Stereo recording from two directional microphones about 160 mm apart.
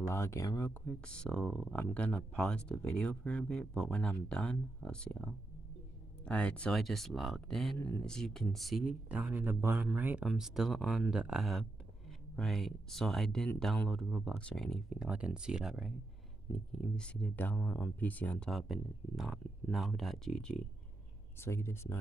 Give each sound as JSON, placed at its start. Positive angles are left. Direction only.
{"t": 0.0, "sound": "speech", "side_deg": 15}
{"t": 1.0, "sound": "speech", "side_deg": 5}
{"t": 21.4, "sound": "speech", "side_deg": 15}